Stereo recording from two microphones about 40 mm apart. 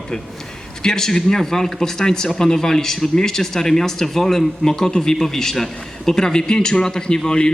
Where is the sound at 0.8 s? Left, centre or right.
Centre.